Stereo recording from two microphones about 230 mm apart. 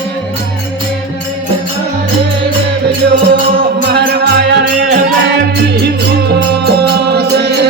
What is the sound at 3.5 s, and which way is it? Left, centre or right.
Music, right.